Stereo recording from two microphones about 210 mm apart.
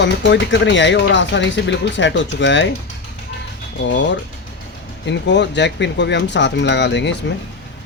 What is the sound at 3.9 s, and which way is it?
Speech, 60° left (ahead or behind).